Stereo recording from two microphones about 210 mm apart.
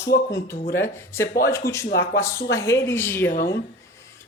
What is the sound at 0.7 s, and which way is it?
A woman's voice, 10° left (ahead or behind).